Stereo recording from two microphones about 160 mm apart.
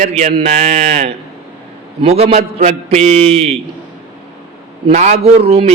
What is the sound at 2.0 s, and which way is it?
A man's voice, 40° right (ahead or behind).